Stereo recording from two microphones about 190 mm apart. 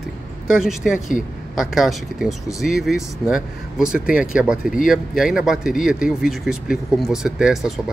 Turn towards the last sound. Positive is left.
turn(degrees=0)  # may be behind; listen again after turning